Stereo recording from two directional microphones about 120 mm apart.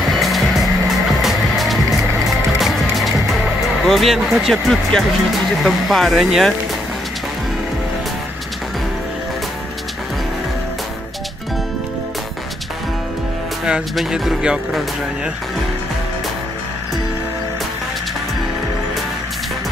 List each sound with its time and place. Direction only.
0.1 s music: centre (ahead or behind)
5.6 s speech: centre (ahead or behind)
13.7 s speech: 5° right (ahead or behind)